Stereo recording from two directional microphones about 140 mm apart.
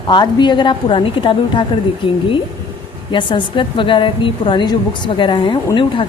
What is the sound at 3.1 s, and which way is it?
A woman's voice, 35° left (ahead or behind).